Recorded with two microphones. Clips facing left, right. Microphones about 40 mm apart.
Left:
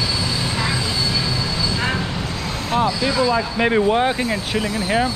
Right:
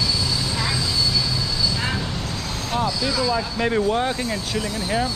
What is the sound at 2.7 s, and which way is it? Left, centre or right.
Speech, left.